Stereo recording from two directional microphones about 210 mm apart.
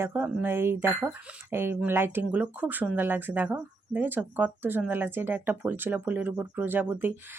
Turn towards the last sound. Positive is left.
turn(degrees=-10)  # may be behind; listen again after turning